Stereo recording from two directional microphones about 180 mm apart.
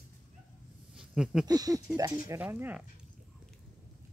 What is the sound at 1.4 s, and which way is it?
Speech, 20° right (ahead or behind).